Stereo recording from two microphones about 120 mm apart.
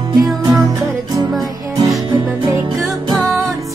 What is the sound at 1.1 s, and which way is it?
Music, 35° right (ahead or behind).